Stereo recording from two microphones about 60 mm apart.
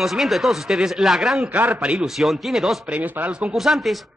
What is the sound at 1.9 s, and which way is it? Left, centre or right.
Speech, centre.